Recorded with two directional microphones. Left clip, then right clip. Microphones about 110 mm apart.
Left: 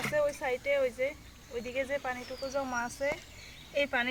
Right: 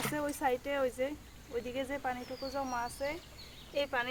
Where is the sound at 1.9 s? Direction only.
5° right (ahead or behind).